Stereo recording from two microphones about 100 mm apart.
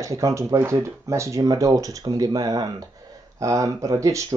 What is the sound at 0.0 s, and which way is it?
Speech, 35° right (ahead or behind).